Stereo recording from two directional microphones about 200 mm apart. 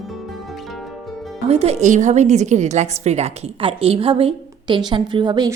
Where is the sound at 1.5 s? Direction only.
30° right (ahead or behind).